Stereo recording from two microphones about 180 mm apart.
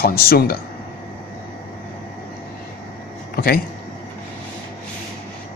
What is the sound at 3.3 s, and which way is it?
Speech, 55° left (ahead or behind).